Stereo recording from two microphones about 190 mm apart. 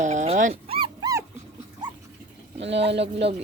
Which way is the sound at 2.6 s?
65° right (ahead or behind).